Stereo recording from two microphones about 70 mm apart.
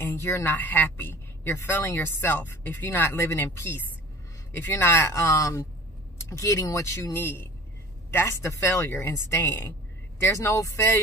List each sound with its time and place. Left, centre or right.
0.0 s speech: left
5.1 s speech: left
7.2 s speech: left